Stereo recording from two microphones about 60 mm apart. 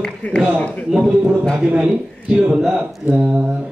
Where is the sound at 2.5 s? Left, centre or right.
Centre.